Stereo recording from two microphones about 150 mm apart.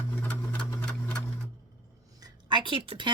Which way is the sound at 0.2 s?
10° left (ahead or behind).